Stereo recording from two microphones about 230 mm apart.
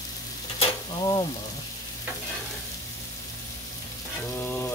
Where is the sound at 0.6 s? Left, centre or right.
Centre.